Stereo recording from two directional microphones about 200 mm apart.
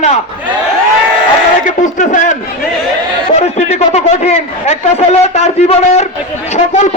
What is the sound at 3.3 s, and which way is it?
A man's voice, 35° left (ahead or behind).